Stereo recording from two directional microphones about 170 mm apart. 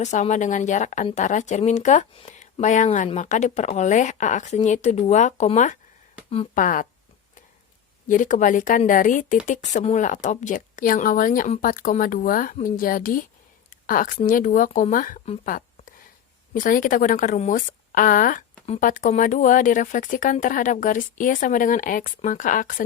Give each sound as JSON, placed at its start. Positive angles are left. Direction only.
{"t": 0.0, "sound": "speech", "side_deg": 45}
{"t": 8.0, "sound": "speech", "side_deg": 50}
{"t": 13.7, "sound": "a sound", "side_deg": 55}
{"t": 14.3, "sound": "speech", "side_deg": 50}
{"t": 18.6, "sound": "speech", "side_deg": 35}
{"t": 18.9, "sound": "speech", "side_deg": 50}